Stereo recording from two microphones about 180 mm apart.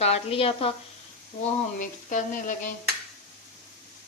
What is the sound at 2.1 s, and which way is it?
Frying, 45° left (ahead or behind).